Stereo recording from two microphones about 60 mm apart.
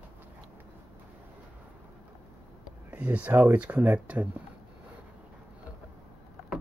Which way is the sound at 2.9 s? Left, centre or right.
Right.